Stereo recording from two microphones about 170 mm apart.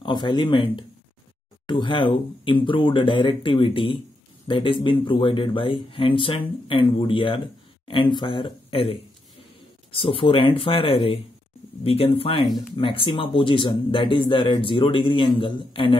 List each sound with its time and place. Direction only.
0.0 s speech: 30° left (ahead or behind)